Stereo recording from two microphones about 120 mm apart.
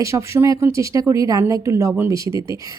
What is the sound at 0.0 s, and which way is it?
Speech, 25° right (ahead or behind).